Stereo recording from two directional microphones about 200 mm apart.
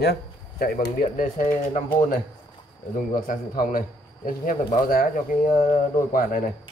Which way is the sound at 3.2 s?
45° left (ahead or behind).